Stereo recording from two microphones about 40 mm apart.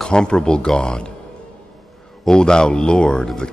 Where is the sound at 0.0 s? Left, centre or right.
Left.